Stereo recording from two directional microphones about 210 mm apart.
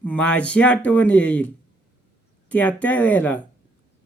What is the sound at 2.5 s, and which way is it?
Speech, 10° left (ahead or behind).